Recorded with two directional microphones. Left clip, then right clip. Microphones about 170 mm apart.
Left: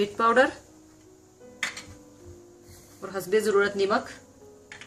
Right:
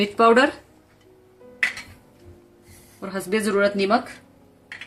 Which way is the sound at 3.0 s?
45° right (ahead or behind).